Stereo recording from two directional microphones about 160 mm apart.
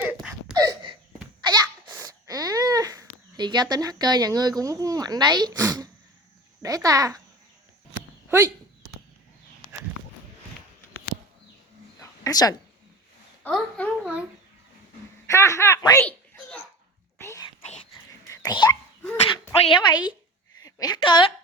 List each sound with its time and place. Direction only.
0.0 s a sound: 10° right (ahead or behind)
0.5 s a sound: 25° right (ahead or behind)
1.4 s babbling: 25° right (ahead or behind)
5.5 s a child's voice: 15° right (ahead or behind)
8.3 s speech: 20° right (ahead or behind)
11.9 s a sound: 20° left (ahead or behind)
13.5 s a woman's voice: 5° left (ahead or behind)
14.0 s speech: 5° right (ahead or behind)
15.3 s speech: 20° left (ahead or behind)
16.0 s a sound: 10° left (ahead or behind)
17.2 s whispering: 20° left (ahead or behind)
18.3 s dog: 25° left (ahead or behind)
19.6 s a woman's voice: 30° left (ahead or behind)